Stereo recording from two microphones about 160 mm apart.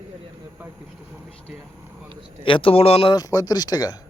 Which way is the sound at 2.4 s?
35° left (ahead or behind).